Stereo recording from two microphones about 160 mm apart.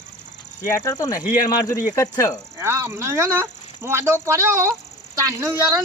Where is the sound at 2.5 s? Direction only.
15° right (ahead or behind).